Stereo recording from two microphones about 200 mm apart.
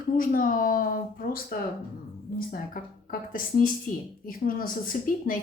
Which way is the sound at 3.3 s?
45° left (ahead or behind).